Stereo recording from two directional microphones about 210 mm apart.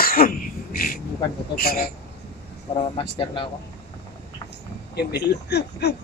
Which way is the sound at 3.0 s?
25° left (ahead or behind).